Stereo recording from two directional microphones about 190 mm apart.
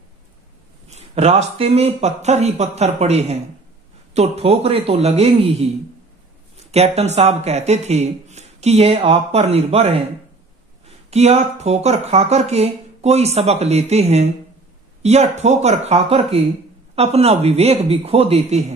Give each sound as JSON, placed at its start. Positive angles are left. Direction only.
{"t": 0.8, "sound": "speech", "side_deg": -35}
{"t": 11.1, "sound": "speech", "side_deg": -35}